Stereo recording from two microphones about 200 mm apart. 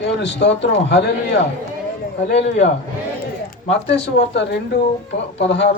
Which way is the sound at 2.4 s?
35° left (ahead or behind).